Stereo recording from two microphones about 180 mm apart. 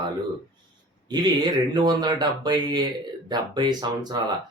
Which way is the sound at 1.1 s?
25° right (ahead or behind).